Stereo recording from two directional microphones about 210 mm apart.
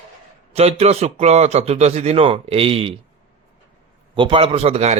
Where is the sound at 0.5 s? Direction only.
30° right (ahead or behind).